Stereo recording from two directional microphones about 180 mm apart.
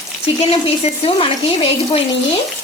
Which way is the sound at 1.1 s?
30° left (ahead or behind).